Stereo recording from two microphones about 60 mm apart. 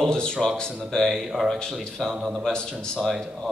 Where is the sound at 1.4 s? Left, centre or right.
Centre.